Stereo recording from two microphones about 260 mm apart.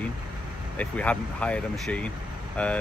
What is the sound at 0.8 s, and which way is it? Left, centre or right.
Speech, centre.